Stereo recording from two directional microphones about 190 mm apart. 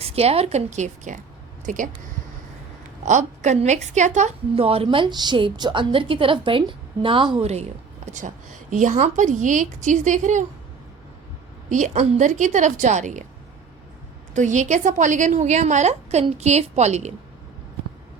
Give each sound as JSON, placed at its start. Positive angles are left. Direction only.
{"t": 0.0, "sound": "a woman's voice", "side_deg": -30}
{"t": 3.0, "sound": "a woman's voice", "side_deg": -40}
{"t": 11.7, "sound": "a woman's voice", "side_deg": -40}
{"t": 14.3, "sound": "a woman's voice", "side_deg": -40}